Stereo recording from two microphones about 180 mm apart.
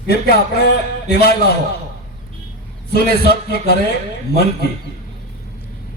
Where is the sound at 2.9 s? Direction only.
65° left (ahead or behind).